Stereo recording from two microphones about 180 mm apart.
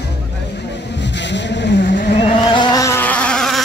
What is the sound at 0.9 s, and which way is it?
Vehicle, 75° left (ahead or behind).